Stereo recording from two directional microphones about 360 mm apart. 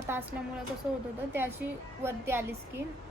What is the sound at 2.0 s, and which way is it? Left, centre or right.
Speech, centre.